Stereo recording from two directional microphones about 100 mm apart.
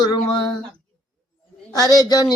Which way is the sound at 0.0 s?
45° left (ahead or behind).